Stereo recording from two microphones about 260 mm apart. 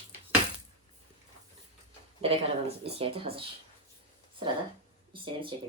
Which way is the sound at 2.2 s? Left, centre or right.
Right.